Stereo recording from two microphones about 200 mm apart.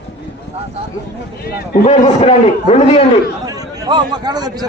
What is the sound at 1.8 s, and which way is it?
Speech, 35° left (ahead or behind).